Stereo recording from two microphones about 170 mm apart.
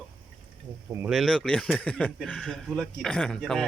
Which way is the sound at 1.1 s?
Centre (ahead or behind).